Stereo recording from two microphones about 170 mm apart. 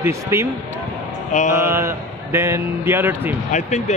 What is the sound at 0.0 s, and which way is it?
Speech, 15° right (ahead or behind).